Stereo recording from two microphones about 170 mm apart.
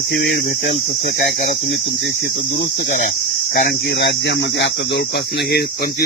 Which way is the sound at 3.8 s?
90° left.